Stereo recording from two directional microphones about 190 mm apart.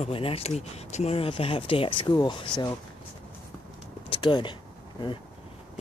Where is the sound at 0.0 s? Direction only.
30° left (ahead or behind).